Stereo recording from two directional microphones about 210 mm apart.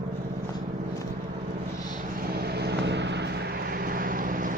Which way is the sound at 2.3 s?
50° right (ahead or behind).